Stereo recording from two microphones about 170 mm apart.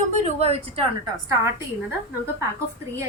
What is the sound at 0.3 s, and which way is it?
Speech, 40° right (ahead or behind).